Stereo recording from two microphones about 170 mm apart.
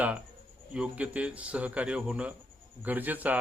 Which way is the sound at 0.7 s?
5° right (ahead or behind).